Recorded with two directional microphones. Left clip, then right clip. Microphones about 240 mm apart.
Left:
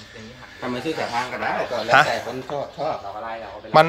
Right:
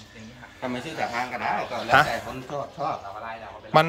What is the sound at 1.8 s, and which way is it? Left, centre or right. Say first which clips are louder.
Speech: left 3 dB; centre.